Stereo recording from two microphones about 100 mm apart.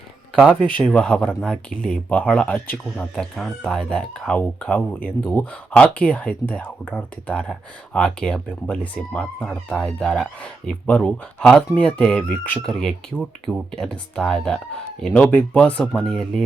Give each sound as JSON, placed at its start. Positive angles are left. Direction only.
{"t": 0.6, "sound": "speech", "side_deg": 10}